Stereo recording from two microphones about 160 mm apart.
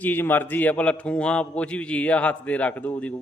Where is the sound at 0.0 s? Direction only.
10° left (ahead or behind).